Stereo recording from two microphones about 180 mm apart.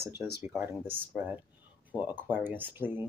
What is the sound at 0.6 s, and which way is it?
Speech, 10° right (ahead or behind).